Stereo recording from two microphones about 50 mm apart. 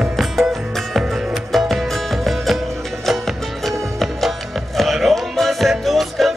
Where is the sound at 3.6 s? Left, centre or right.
Centre.